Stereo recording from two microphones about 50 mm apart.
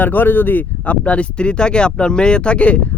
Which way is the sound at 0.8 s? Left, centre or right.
Left.